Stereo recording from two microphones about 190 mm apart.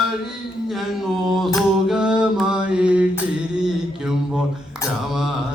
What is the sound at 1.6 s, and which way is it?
Mantra, centre (ahead or behind).